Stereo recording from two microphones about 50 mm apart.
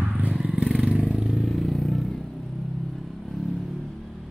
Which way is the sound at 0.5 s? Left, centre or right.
Centre.